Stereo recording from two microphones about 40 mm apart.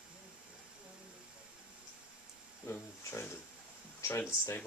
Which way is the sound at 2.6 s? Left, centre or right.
Left.